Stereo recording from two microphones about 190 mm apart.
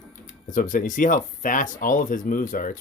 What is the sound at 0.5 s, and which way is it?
Speech, 45° left (ahead or behind).